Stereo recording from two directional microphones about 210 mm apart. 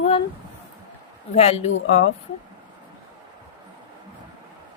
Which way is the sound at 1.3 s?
30° left (ahead or behind).